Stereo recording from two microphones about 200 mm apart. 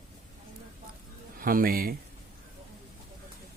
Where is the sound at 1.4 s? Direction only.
45° right (ahead or behind).